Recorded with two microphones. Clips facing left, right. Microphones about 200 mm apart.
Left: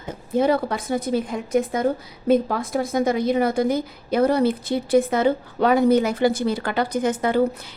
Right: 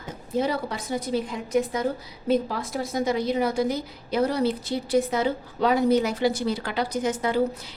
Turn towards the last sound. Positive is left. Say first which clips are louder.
# left 4 dB
turn(degrees=55)  # may be behind; listen again after turning